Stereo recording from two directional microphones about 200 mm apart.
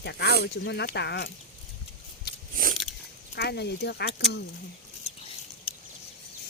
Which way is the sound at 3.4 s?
55° left (ahead or behind).